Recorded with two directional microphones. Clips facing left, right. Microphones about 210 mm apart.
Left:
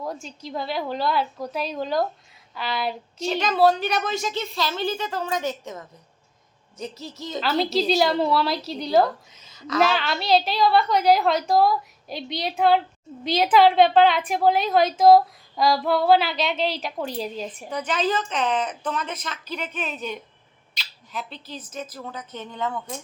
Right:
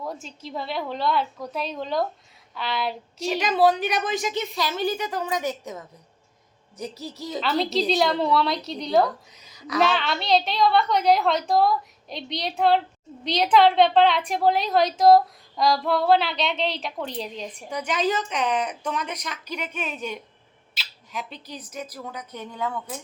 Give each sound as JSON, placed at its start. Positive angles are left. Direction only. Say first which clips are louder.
{"t": 0.0, "sound": "a woman's voice", "louder": "left 1 dB", "side_deg": 0}
{"t": 3.6, "sound": "a woman's voice", "louder": "left 1 dB", "side_deg": -15}
{"t": 7.3, "sound": "a woman's voice", "louder": "left 1 dB", "side_deg": 0}
{"t": 17.7, "sound": "a woman's voice", "louder": "even", "side_deg": -10}